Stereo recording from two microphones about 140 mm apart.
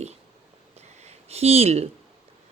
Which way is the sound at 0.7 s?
50° right (ahead or behind).